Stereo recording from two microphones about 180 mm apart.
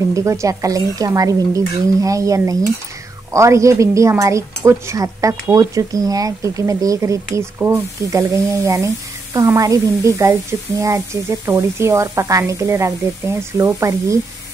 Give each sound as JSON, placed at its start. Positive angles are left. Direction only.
{"t": 0.1, "sound": "a woman's voice", "side_deg": -15}